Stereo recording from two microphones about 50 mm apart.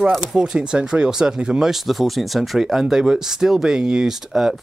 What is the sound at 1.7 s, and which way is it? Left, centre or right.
Speech, centre.